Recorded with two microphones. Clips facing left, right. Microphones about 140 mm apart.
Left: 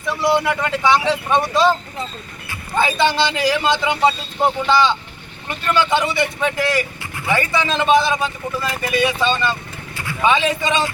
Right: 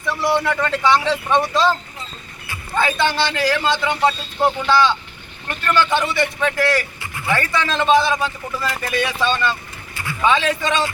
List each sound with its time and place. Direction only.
0.1 s a man's voice: 10° left (ahead or behind)
2.7 s a man's voice: 15° left (ahead or behind)